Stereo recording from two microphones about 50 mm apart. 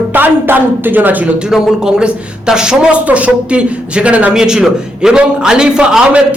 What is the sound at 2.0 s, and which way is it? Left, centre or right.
A man's voice, centre.